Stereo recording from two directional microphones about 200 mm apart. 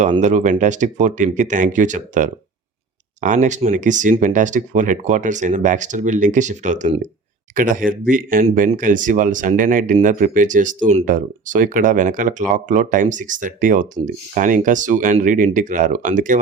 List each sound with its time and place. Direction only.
0.0 s speech: 35° right (ahead or behind)